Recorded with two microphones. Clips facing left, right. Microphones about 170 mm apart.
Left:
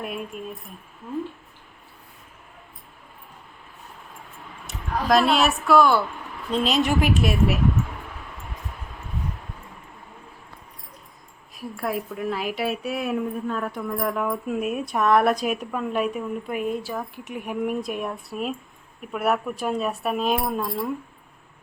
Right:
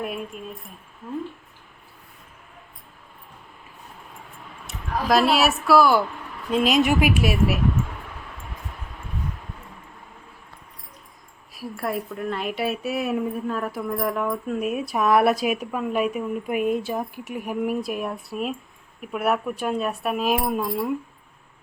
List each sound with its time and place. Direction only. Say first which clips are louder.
0.3 s a woman's voice: left 2 dB; centre (ahead or behind)
4.6 s speech: even; centre (ahead or behind)
11.7 s a woman's voice: even; centre (ahead or behind)
16.5 s speech: right 5 dB; 15° right (ahead or behind)
17.2 s a woman's voice: even; centre (ahead or behind)